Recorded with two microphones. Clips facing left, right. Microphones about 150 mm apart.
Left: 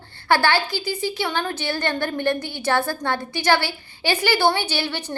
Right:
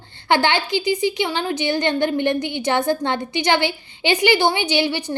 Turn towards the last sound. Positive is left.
turn(degrees=-10)  # may be behind; listen again after turning